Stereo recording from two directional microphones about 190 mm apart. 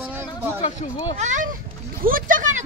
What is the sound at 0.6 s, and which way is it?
Speech, 40° left (ahead or behind).